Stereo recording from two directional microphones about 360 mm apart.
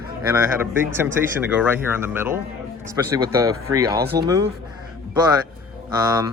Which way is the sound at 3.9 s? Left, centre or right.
Right.